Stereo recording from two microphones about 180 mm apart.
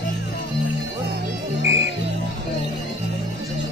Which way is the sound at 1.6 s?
90° right.